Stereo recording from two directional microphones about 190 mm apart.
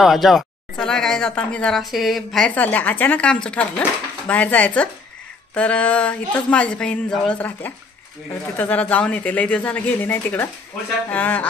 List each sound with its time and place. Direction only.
0.0 s speech: centre (ahead or behind)